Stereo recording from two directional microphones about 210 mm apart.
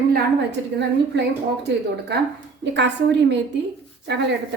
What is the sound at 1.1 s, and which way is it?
Speech, 55° right (ahead or behind).